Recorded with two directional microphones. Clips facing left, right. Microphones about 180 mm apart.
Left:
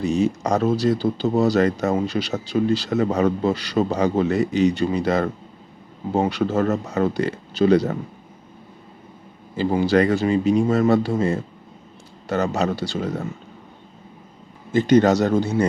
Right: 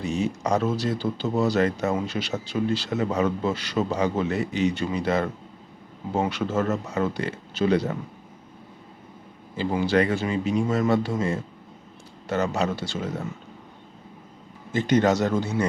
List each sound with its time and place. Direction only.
0.0 s speech: 40° left (ahead or behind)
9.6 s speech: 40° left (ahead or behind)
14.7 s speech: 35° left (ahead or behind)